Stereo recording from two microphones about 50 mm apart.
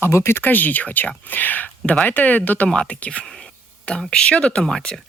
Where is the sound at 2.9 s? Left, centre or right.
Left.